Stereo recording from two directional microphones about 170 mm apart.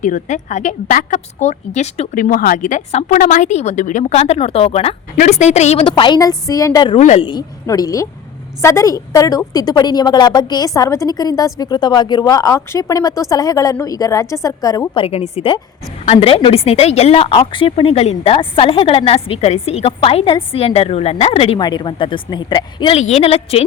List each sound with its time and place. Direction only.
0.0 s a woman's voice: 45° left (ahead or behind); by 6.9 s 20° left (ahead or behind)
6.9 s a woman's voice: 40° left (ahead or behind)
7.3 s a woman's voice: 25° left (ahead or behind)
15.0 s a woman's voice: 35° left (ahead or behind)
23.0 s a woman's voice: 40° left (ahead or behind)